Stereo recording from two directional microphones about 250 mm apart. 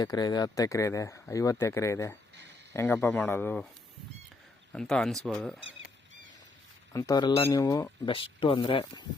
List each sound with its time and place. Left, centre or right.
0.0 s speech: centre
4.7 s speech: centre
6.9 s speech: centre